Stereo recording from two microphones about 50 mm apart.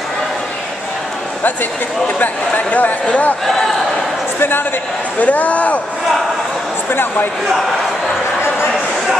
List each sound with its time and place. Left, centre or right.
2.1 s speech: left
4.4 s speech: left
5.2 s speech: left
6.9 s speech: left